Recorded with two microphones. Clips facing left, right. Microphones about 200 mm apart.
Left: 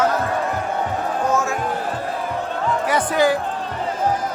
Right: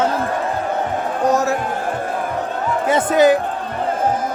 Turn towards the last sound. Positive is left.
turn(degrees=-20)  # may be behind; listen again after turning